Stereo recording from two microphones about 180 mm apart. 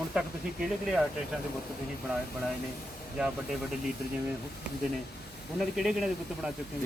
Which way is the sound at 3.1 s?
5° right (ahead or behind).